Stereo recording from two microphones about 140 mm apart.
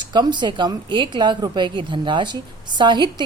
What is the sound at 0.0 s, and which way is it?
Speech, 30° right (ahead or behind).